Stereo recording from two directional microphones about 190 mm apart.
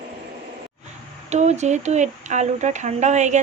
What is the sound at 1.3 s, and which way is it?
Speech, 35° right (ahead or behind).